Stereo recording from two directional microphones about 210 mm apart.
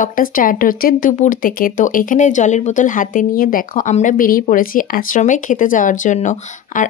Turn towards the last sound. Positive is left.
turn(degrees=35)  # may be behind; listen again after turning